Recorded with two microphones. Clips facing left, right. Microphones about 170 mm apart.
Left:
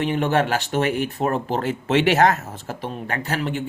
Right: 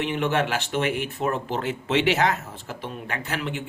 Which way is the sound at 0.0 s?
40° left (ahead or behind).